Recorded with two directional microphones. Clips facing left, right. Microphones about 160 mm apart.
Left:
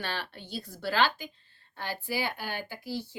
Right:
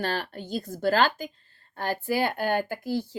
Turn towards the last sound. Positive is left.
turn(degrees=-50)  # may be behind; listen again after turning